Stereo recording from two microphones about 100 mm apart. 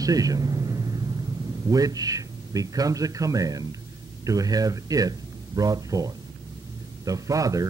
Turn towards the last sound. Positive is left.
turn(degrees=-35)  # may be behind; listen again after turning